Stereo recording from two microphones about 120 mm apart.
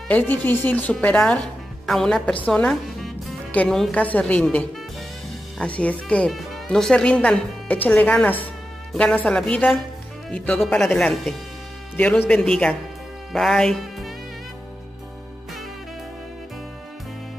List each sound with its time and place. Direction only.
0.1 s a woman's voice: 15° left (ahead or behind)
2.4 s music: 10° left (ahead or behind)
3.5 s speech: 5° left (ahead or behind)
5.6 s speech: 10° left (ahead or behind)